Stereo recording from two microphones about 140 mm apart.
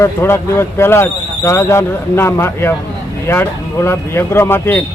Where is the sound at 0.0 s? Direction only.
20° left (ahead or behind).